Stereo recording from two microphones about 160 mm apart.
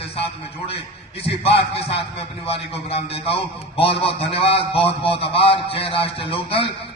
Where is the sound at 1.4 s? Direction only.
40° left (ahead or behind).